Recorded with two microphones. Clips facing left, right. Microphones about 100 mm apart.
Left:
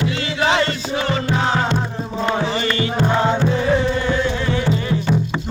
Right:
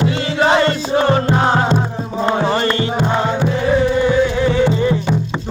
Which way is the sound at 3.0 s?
15° right (ahead or behind).